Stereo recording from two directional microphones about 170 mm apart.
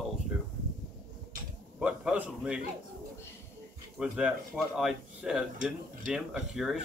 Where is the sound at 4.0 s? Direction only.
5° right (ahead or behind).